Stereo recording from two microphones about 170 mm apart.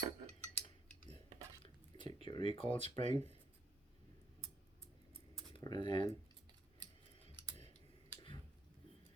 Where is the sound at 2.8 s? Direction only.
40° right (ahead or behind).